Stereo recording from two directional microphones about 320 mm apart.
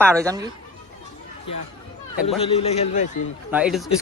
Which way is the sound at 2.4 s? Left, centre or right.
Centre.